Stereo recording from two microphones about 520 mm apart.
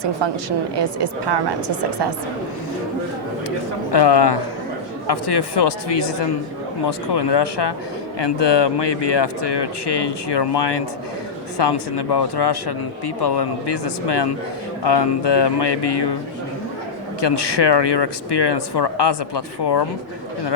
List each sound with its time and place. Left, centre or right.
0.8 s a woman's voice: right
3.9 s speech: left
17.2 s speech: left